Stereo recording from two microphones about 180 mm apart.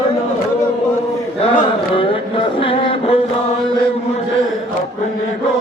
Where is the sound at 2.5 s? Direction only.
30° left (ahead or behind).